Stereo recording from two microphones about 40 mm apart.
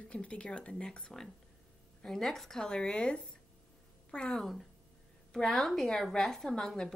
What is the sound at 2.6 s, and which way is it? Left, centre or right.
A woman's voice, left.